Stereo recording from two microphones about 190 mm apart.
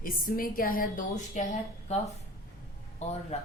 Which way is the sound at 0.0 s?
50° left (ahead or behind).